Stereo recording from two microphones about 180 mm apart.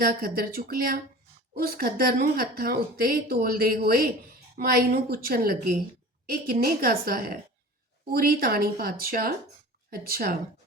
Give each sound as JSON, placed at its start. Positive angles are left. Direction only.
{"t": 0.0, "sound": "speech", "side_deg": -55}